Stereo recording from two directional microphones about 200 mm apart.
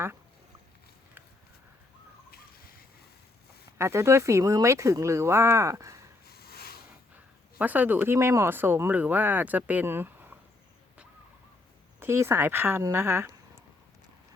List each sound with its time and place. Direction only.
3.8 s speech: 15° right (ahead or behind)
6.2 s a sound: 50° left (ahead or behind)
7.6 s speech: 10° right (ahead or behind)
11.9 s speech: 10° right (ahead or behind)